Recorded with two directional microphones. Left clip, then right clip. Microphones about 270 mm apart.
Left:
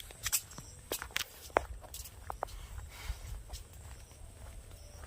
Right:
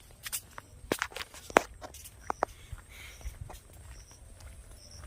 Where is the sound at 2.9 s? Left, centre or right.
Centre.